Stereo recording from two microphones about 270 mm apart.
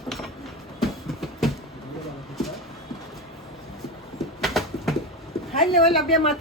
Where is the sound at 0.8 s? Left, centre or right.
Centre.